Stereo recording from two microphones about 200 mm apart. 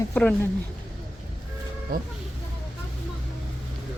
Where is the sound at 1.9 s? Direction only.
50° right (ahead or behind).